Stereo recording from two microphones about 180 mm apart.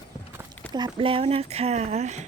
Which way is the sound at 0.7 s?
25° right (ahead or behind).